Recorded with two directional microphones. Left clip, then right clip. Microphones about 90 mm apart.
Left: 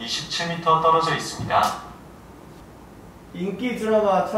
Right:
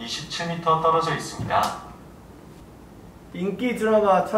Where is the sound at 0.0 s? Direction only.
10° right (ahead or behind).